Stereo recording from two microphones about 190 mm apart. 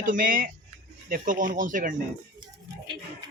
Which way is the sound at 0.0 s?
45° right (ahead or behind).